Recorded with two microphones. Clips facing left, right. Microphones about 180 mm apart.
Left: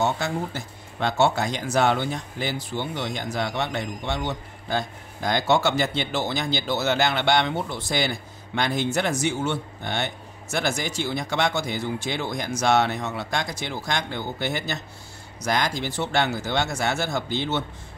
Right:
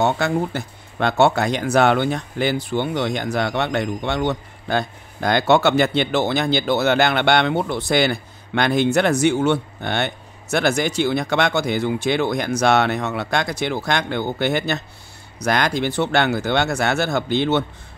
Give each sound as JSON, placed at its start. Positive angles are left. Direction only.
{"t": 0.0, "sound": "speech", "side_deg": -65}